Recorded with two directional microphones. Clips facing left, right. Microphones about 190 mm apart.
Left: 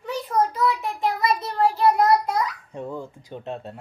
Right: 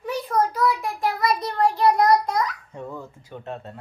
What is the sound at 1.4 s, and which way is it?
A child's voice, 5° left (ahead or behind).